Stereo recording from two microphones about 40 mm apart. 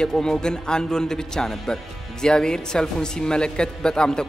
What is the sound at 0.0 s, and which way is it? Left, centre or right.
Speech, centre.